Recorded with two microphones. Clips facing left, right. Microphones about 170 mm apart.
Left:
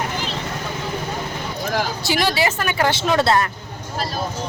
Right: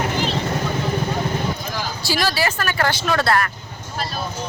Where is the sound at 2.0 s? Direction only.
20° left (ahead or behind).